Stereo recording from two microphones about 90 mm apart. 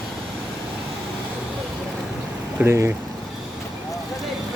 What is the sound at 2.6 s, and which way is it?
Speech, 20° right (ahead or behind).